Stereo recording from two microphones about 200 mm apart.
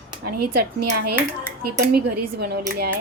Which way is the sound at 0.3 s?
50° right (ahead or behind).